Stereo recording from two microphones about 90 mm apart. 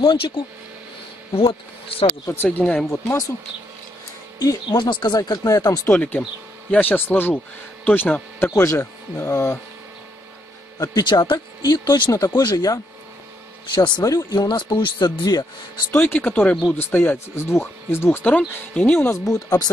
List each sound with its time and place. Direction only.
0.0 s speech: 65° left (ahead or behind)
1.3 s speech: 85° left
2.3 s speech: 20° left (ahead or behind)
2.9 s speech: 35° left (ahead or behind)
4.6 s speech: 60° left (ahead or behind)
5.4 s speech: 40° left (ahead or behind)
5.9 s speech: 20° left (ahead or behind)
8.5 s speech: 30° left (ahead or behind)
10.8 s speech: 50° left (ahead or behind)
13.7 s speech: 55° left (ahead or behind)
14.0 s speech: 45° left (ahead or behind)
16.0 s speech: 20° left (ahead or behind)
18.9 s speech: 35° left (ahead or behind)